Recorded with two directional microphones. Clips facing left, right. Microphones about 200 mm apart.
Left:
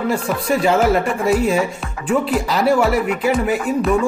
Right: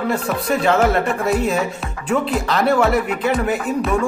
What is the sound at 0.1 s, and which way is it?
Speech, 10° left (ahead or behind).